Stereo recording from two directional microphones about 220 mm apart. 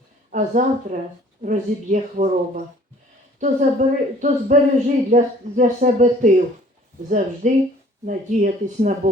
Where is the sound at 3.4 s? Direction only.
35° right (ahead or behind).